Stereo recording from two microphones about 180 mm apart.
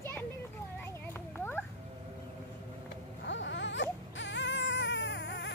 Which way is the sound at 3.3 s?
85° left.